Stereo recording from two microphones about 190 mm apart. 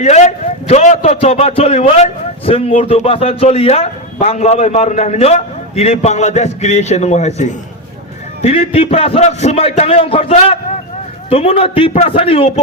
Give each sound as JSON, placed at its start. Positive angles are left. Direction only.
{"t": 0.0, "sound": "a man's voice", "side_deg": 35}